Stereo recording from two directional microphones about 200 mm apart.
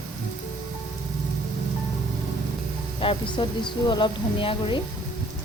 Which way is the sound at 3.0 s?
25° left (ahead or behind).